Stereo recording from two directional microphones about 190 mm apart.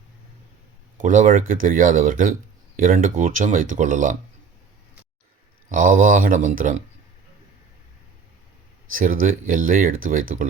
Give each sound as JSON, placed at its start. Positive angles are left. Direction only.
{"t": 1.0, "sound": "speech", "side_deg": -40}
{"t": 5.6, "sound": "speech", "side_deg": -45}
{"t": 9.0, "sound": "speech", "side_deg": -45}